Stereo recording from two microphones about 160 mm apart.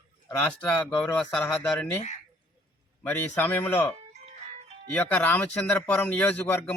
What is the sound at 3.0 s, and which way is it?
Speech, 15° left (ahead or behind).